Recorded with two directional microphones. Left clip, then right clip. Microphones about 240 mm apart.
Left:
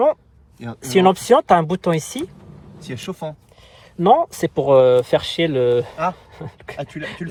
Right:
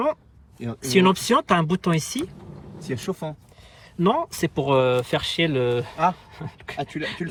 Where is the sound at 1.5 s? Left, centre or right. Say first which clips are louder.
Left 6 dB; right.